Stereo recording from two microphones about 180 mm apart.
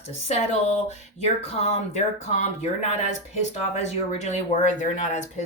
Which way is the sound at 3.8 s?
40° left (ahead or behind).